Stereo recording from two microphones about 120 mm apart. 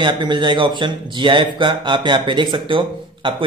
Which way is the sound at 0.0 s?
40° right (ahead or behind).